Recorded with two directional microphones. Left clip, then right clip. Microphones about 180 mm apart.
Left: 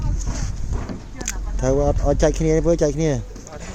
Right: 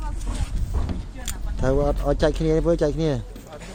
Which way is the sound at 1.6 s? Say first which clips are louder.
Left 3 dB; centre (ahead or behind).